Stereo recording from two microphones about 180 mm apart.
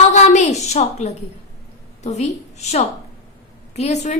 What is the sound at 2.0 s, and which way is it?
A woman's voice, 40° left (ahead or behind).